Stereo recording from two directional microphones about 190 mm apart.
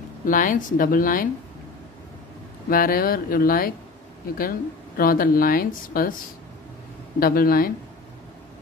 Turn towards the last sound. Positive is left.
turn(degrees=50)  # may be behind; listen again after turning